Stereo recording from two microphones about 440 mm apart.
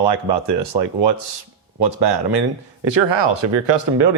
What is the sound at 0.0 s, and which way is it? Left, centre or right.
Speech, right.